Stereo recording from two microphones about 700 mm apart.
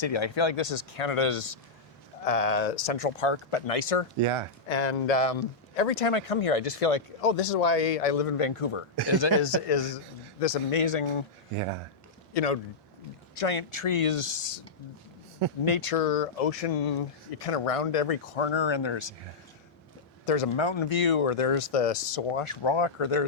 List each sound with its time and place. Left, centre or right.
0.0 s speech: left
2.2 s speech: left
4.2 s speech: right
4.7 s speech: left
6.0 s speech: left
12.3 s speech: left
15.6 s speech: left
20.2 s speech: left
20.6 s speech: left